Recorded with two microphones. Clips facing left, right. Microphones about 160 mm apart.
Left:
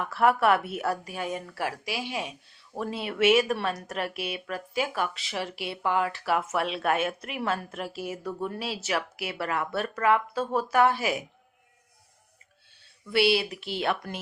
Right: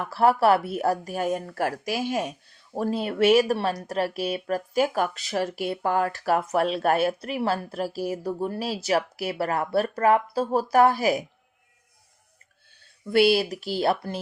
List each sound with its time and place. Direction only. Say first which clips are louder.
0.0 s speech: right 3 dB; 30° right (ahead or behind)
13.1 s speech: right 4 dB; 45° right (ahead or behind)